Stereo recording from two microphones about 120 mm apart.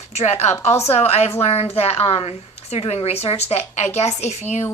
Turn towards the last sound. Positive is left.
turn(degrees=70)  # may be behind; listen again after turning